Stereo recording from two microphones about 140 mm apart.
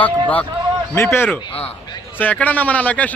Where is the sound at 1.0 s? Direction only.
15° left (ahead or behind).